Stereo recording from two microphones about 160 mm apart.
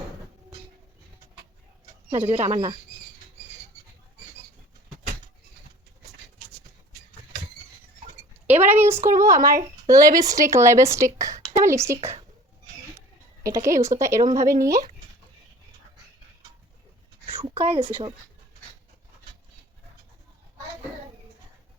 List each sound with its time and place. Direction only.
2.0 s speech: 45° right (ahead or behind)
8.4 s speech: 10° right (ahead or behind)
13.4 s speech: 20° right (ahead or behind)
17.4 s speech: 35° right (ahead or behind)